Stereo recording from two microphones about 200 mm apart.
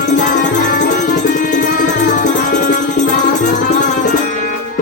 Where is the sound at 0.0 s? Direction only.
40° left (ahead or behind).